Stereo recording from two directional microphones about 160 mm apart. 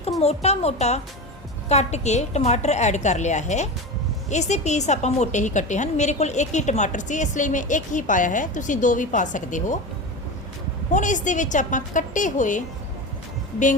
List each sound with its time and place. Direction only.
0.2 s a woman's voice: 40° left (ahead or behind)
10.9 s a woman's voice: 50° left (ahead or behind)